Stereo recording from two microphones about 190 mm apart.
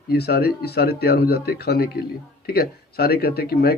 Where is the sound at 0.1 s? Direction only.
55° left (ahead or behind).